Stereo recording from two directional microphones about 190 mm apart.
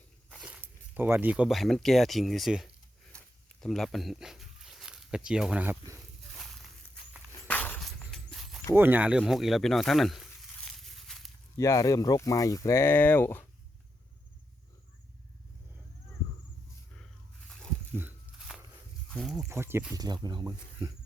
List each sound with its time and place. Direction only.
0.3 s speech: centre (ahead or behind)
3.1 s zipper: 5° left (ahead or behind)
6.3 s a sound: centre (ahead or behind)
7.4 s dog: 10° left (ahead or behind)
8.7 s speech: 10° right (ahead or behind)
10.7 s a sound: centre (ahead or behind)
11.5 s speech: 15° left (ahead or behind)
17.9 s a sound: 5° right (ahead or behind)
19.1 s speech: centre (ahead or behind)
19.5 s speech: 15° right (ahead or behind)